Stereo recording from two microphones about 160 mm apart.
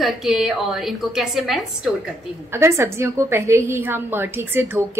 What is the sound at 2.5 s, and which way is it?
A woman's voice, 15° right (ahead or behind).